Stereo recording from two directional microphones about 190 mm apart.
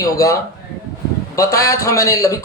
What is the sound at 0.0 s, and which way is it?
Speech, 15° left (ahead or behind).